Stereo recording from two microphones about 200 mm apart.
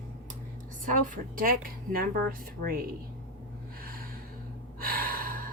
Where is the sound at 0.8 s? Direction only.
40° right (ahead or behind).